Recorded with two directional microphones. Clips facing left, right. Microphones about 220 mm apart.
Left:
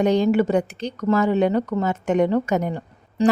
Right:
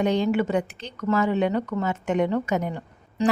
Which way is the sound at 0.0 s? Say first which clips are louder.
Left 4 dB; 40° left (ahead or behind).